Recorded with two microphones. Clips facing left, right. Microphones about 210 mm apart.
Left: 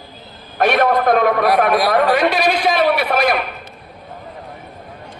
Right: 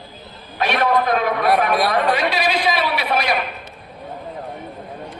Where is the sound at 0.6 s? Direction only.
50° left (ahead or behind).